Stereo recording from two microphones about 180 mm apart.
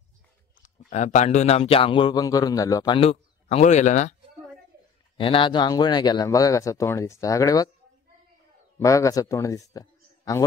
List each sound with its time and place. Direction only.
0.6 s speech: 45° left (ahead or behind); by 3.0 s 20° left (ahead or behind)
3.0 s speech: 35° left (ahead or behind)
5.1 s speech: 30° left (ahead or behind)
8.7 s a man's voice: 15° left (ahead or behind)